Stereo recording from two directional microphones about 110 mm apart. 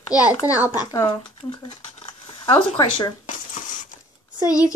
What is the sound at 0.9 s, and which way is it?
Speech, 30° left (ahead or behind).